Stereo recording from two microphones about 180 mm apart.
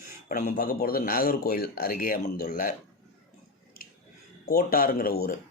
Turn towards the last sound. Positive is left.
turn(degrees=55)  # may be behind; listen again after turning